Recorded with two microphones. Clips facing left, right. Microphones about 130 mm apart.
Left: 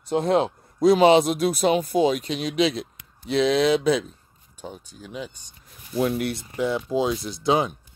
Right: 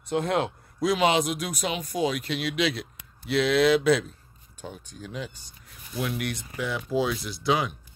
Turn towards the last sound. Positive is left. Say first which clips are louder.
# left 4 dB
turn(degrees=25)  # may be behind; listen again after turning